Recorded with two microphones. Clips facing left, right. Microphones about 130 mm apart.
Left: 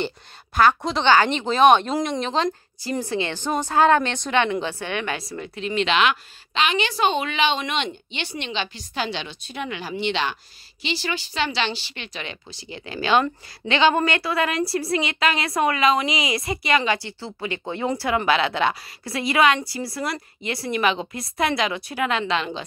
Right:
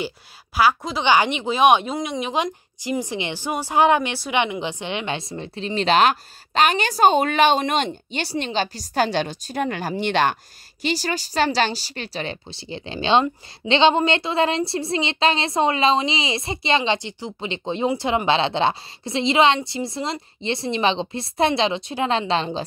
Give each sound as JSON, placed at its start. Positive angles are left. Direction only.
{"t": 0.6, "sound": "a woman's voice", "side_deg": -5}